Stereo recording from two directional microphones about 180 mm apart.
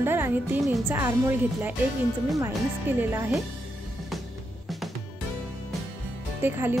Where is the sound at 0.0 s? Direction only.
10° right (ahead or behind).